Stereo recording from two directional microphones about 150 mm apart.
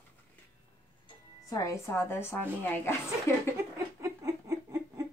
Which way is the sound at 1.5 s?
20° left (ahead or behind).